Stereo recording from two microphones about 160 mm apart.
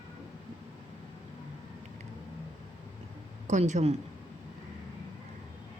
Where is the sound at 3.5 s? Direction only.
45° right (ahead or behind).